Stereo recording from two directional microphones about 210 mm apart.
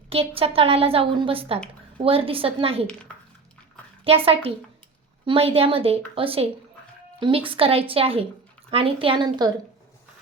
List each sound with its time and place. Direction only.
0.1 s a woman's voice: 25° right (ahead or behind)
4.0 s a woman's voice: 25° right (ahead or behind)